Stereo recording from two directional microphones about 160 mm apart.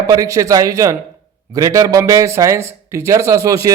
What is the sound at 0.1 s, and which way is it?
A man's voice, 20° right (ahead or behind).